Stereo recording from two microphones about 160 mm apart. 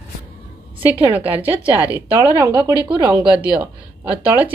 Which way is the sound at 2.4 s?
20° right (ahead or behind).